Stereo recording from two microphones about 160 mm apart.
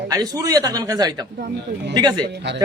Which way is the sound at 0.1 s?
20° right (ahead or behind).